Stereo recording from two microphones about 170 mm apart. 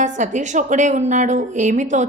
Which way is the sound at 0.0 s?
45° right (ahead or behind).